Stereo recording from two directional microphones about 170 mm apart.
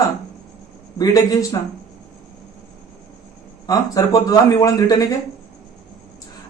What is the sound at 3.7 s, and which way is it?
A man's voice, 20° left (ahead or behind).